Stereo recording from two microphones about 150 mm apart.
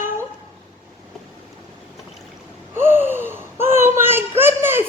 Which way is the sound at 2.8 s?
15° right (ahead or behind).